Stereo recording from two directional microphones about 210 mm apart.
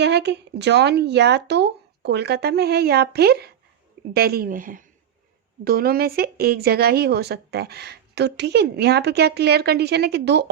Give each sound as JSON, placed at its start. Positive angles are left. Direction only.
{"t": 0.0, "sound": "a woman's voice", "side_deg": -55}